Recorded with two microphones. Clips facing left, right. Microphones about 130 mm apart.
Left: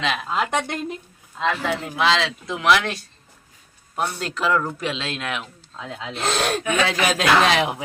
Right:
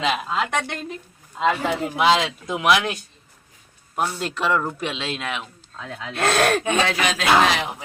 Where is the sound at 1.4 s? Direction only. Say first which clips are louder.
Right 2 dB; 10° right (ahead or behind).